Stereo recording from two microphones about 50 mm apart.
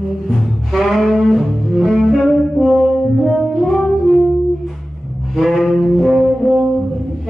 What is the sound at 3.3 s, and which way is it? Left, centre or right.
Brass instrument, centre.